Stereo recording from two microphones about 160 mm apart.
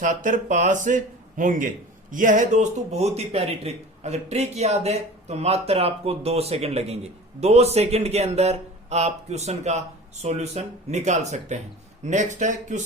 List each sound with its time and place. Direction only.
0.0 s speech: 55° right (ahead or behind)